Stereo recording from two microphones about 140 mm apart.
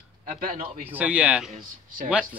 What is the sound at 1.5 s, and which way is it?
Speech, 80° right.